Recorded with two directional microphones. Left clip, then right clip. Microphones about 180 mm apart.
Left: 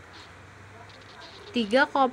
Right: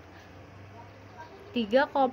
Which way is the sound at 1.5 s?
40° left (ahead or behind).